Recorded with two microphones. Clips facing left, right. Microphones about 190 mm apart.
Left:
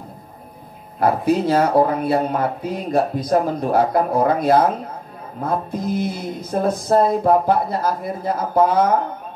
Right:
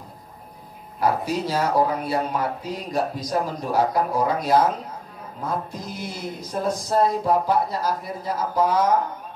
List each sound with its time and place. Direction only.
0.9 s speech: 55° left (ahead or behind)